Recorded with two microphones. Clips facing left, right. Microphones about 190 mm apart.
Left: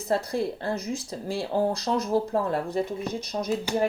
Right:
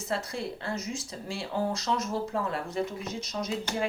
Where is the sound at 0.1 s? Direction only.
35° left (ahead or behind).